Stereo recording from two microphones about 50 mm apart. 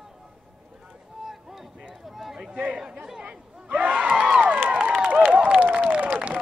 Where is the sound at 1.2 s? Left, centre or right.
Centre.